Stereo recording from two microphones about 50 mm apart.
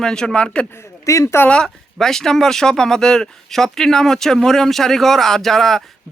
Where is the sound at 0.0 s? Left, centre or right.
Centre.